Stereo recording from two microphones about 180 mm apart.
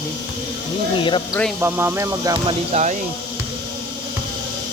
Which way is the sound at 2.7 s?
40° right (ahead or behind).